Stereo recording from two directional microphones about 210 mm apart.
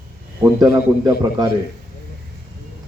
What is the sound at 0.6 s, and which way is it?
Speech, 15° right (ahead or behind).